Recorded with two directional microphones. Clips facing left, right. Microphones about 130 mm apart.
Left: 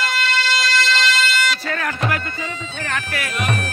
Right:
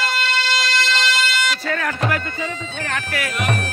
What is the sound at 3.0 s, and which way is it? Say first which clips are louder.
Bagpipes: right 2 dB; 90° right.